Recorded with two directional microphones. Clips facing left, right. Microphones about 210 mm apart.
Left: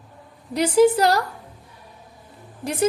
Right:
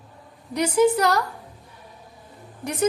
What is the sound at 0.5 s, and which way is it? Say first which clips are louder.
Speech: left 3 dB; 30° left (ahead or behind).